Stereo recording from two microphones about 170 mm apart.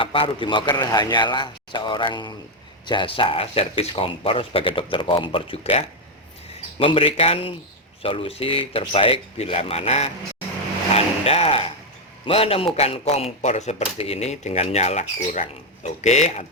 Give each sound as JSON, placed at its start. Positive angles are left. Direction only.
{"t": 0.0, "sound": "a man's voice", "side_deg": 30}